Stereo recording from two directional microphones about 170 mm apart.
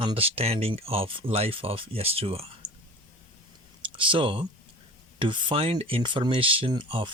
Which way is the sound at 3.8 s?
30° right (ahead or behind).